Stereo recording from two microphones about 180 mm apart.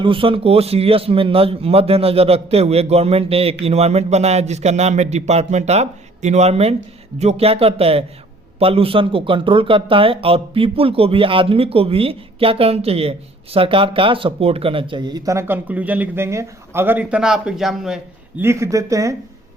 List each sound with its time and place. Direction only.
0.0 s a man's voice: 30° right (ahead or behind); by 18.4 s 5° right (ahead or behind)
18.4 s speech: 15° right (ahead or behind)